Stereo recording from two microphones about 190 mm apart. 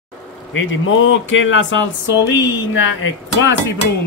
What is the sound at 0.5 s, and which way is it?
Speech, 85° left.